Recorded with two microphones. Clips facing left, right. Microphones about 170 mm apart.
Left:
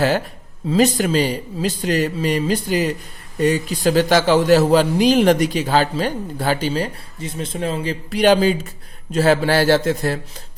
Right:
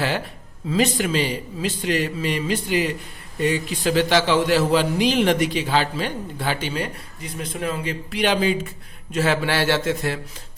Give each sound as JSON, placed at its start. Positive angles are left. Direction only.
{"t": 0.7, "sound": "a man's voice", "side_deg": 40}